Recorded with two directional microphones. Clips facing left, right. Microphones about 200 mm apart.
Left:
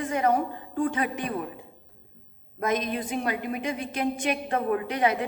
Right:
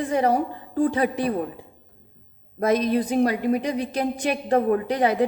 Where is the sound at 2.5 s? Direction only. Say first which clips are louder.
Right 7 dB; 35° right (ahead or behind).